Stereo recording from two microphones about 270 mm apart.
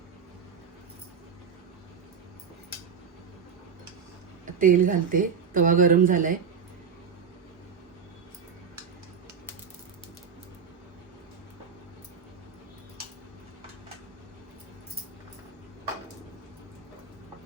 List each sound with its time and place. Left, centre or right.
4.6 s speech: right